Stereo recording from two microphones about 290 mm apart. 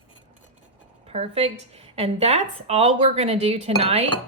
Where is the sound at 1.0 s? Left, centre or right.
Right.